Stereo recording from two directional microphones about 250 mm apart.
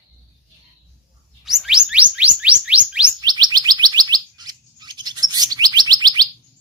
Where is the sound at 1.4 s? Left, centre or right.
Centre.